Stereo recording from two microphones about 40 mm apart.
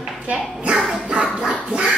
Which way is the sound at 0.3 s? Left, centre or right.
Right.